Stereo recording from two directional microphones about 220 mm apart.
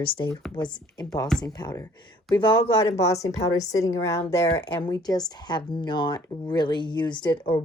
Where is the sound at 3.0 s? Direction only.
15° left (ahead or behind).